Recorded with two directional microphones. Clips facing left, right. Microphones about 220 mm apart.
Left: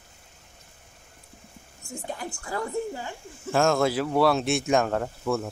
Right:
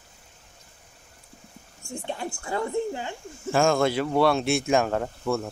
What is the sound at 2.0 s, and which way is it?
Speech, 25° right (ahead or behind).